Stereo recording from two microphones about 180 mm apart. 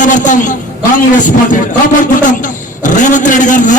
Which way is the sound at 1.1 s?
45° left (ahead or behind).